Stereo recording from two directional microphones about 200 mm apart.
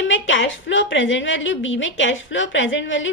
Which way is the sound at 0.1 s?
70° left (ahead or behind).